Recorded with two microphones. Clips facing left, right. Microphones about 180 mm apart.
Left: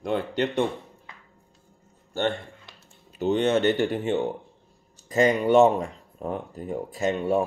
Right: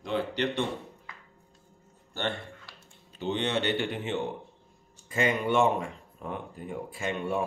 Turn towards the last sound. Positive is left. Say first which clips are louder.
# left 7 dB
turn(degrees=40)  # may be behind; listen again after turning